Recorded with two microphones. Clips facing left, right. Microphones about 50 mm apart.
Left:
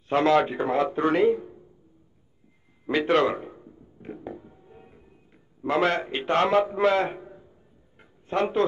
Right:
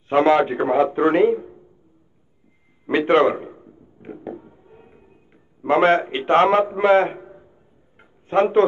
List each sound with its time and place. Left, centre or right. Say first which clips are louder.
0.1 s a man's voice: right 5 dB; right
2.9 s a man's voice: right 5 dB; right
4.0 s a sound: right 2 dB; right
5.6 s a man's voice: right 7 dB; right
8.3 s a man's voice: right 8 dB; right